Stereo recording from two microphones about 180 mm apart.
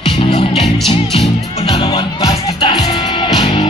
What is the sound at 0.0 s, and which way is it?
Music, 35° left (ahead or behind).